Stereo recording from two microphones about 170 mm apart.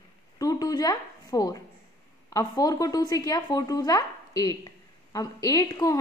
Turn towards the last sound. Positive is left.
turn(degrees=20)  # may be behind; listen again after turning